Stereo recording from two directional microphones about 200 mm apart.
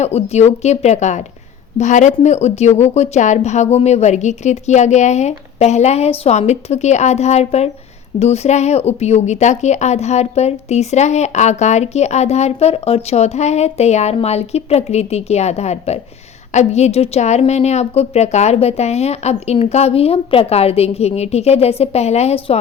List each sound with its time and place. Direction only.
0.0 s a woman's voice: 30° left (ahead or behind)